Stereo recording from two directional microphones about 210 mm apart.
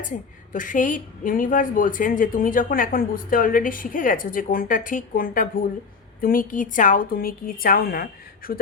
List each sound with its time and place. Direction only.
0.5 s a woman's voice: 40° left (ahead or behind)